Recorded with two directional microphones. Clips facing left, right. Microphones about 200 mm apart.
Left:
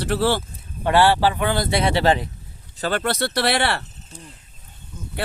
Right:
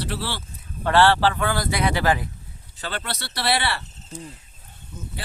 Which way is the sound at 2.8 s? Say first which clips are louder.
Left 9 dB; 45° left (ahead or behind).